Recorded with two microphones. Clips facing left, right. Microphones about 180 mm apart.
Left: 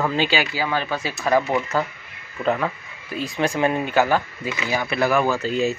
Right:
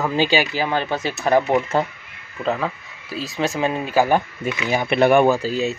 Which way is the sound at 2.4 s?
Centre (ahead or behind).